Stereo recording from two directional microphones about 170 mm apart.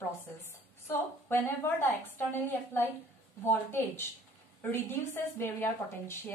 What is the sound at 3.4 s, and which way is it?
Speech, 15° left (ahead or behind).